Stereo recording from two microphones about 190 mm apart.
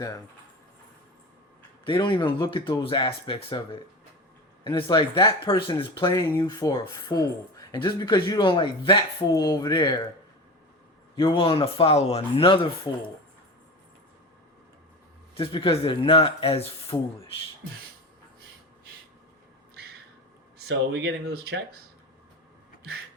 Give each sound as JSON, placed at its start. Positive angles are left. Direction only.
{"t": 1.8, "sound": "speech", "side_deg": 25}
{"t": 4.6, "sound": "speech", "side_deg": 25}
{"t": 11.2, "sound": "speech", "side_deg": 25}
{"t": 15.4, "sound": "speech", "side_deg": 30}
{"t": 20.6, "sound": "speech", "side_deg": -60}